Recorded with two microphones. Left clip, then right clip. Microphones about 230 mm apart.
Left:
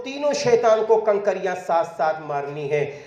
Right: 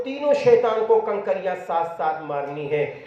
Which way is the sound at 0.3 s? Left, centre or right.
Left.